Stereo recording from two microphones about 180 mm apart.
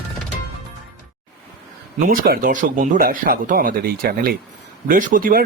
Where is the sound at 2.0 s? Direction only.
50° right (ahead or behind).